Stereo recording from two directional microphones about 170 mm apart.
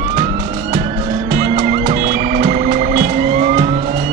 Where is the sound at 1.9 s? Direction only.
45° right (ahead or behind).